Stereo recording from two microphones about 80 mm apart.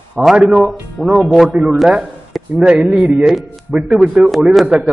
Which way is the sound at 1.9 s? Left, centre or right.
Centre.